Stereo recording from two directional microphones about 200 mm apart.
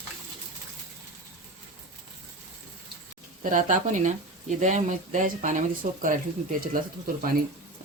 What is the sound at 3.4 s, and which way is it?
Speech, 40° right (ahead or behind).